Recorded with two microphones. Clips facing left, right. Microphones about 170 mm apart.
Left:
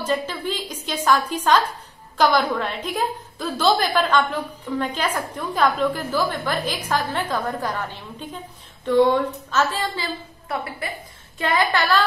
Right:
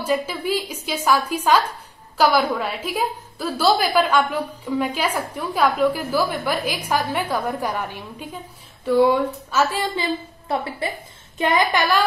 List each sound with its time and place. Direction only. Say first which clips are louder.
0.0 s a woman's voice: right 2 dB; 10° right (ahead or behind)
10.5 s a woman's voice: right 4 dB; 25° right (ahead or behind)